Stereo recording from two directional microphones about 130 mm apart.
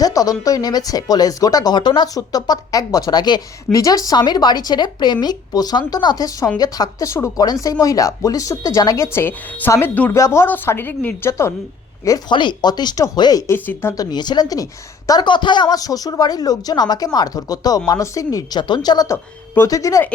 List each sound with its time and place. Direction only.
0.0 s a woman's voice: 30° left (ahead or behind)
12.3 s speech: 35° left (ahead or behind)
13.5 s a woman's voice: 20° left (ahead or behind)
14.0 s a woman's voice: 35° left (ahead or behind)